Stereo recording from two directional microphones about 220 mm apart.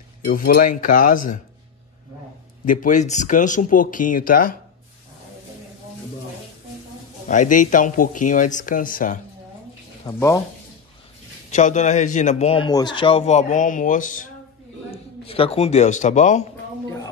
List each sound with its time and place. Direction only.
0.2 s speech: 40° left (ahead or behind)
2.6 s speech: 35° left (ahead or behind)
7.2 s speech: 35° left (ahead or behind)
10.0 s speech: 15° left (ahead or behind)
11.5 s speech: 35° left (ahead or behind)
14.9 s a man's voice: 25° left (ahead or behind)